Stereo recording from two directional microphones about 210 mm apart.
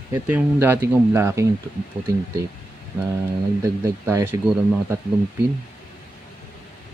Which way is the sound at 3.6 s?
15° right (ahead or behind).